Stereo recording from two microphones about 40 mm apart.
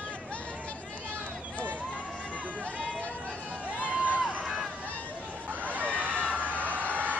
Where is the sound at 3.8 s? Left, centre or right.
Right.